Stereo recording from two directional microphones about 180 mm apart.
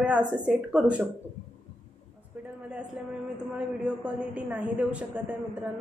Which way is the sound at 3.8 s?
5° right (ahead or behind).